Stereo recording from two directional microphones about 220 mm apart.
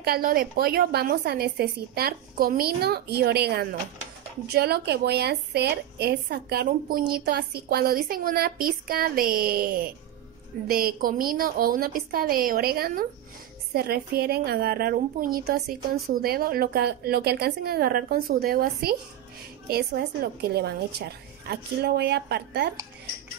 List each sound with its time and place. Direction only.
0.0 s a woman's voice: 45° right (ahead or behind)